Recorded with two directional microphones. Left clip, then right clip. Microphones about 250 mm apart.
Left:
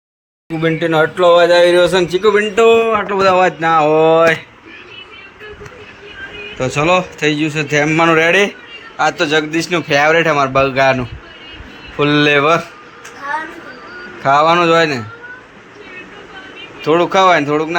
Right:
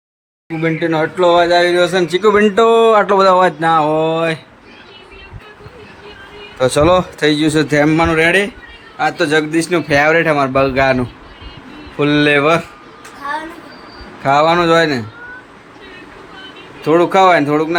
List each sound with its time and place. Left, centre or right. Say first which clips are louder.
0.6 s a man's voice: left 2 dB; centre
6.6 s a man's voice: right 3 dB; right
14.2 s a man's voice: left 1 dB; centre
16.8 s a man's voice: right 1 dB; centre